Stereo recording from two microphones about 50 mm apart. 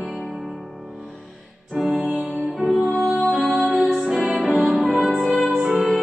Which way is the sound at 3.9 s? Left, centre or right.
Centre.